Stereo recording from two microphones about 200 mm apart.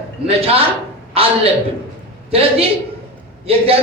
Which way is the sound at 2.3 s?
30° right (ahead or behind).